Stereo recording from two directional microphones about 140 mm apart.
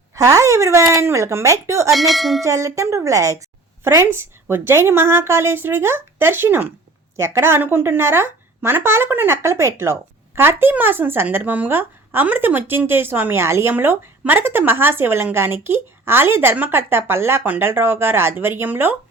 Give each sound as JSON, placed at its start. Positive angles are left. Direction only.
{"t": 0.1, "sound": "a woman's voice", "side_deg": -25}
{"t": 1.9, "sound": "bell", "side_deg": 0}
{"t": 2.4, "sound": "a woman's voice", "side_deg": -20}